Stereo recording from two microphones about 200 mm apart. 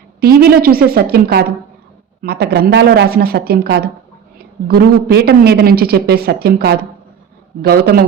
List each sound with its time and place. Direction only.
0.2 s a man's voice: 50° right (ahead or behind)